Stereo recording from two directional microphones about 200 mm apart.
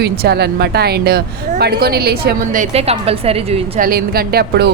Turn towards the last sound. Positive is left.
turn(degrees=-50)  # may be behind; listen again after turning